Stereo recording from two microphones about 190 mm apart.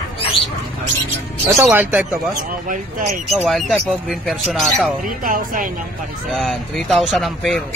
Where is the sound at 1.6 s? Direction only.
10° right (ahead or behind).